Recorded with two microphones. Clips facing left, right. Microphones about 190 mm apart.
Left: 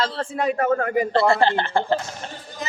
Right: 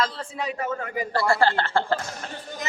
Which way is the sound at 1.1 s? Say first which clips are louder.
Left 2 dB; 20° left (ahead or behind).